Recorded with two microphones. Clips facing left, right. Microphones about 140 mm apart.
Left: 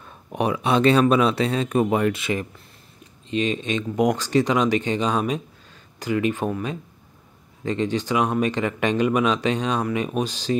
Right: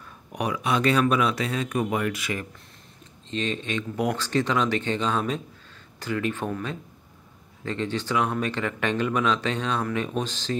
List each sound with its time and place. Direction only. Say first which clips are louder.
0.0 s speech: left 5 dB; 30° left (ahead or behind)
3.3 s speech: left 5 dB; 15° left (ahead or behind)